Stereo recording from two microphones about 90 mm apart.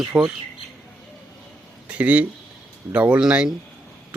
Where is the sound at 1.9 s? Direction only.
15° right (ahead or behind).